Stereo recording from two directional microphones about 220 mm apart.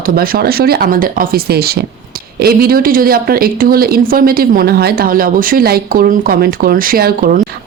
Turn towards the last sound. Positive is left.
turn(degrees=-40)  # may be behind; listen again after turning